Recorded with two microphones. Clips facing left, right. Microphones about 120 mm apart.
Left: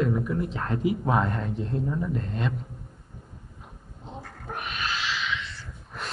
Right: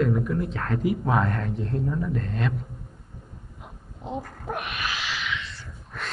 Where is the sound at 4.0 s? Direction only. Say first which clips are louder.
Right 8 dB; 80° right.